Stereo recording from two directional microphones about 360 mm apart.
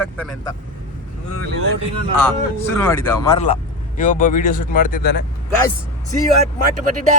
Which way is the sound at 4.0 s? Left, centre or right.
Left.